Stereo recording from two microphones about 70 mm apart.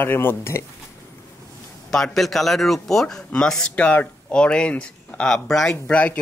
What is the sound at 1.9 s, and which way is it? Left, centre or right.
Speech, centre.